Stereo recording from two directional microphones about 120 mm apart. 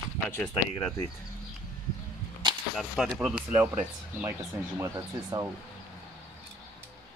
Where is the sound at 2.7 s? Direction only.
Centre (ahead or behind).